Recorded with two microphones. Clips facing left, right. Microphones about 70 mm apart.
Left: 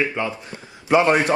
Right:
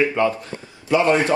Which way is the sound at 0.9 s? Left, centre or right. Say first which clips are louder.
Left 1 dB; left.